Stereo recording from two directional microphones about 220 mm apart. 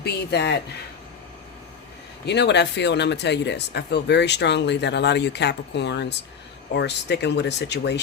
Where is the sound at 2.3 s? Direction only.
50° left (ahead or behind).